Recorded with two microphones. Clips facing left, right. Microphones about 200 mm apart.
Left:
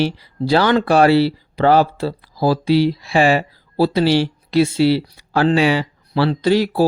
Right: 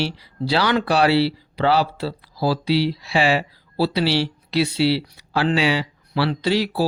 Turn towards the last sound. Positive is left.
turn(degrees=50)  # may be behind; listen again after turning